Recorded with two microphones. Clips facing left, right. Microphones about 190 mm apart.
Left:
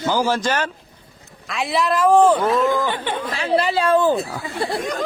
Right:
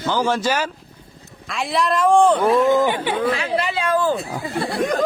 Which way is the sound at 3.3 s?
35° left (ahead or behind).